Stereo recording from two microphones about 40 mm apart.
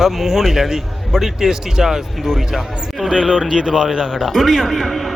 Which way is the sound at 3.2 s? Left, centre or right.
Left.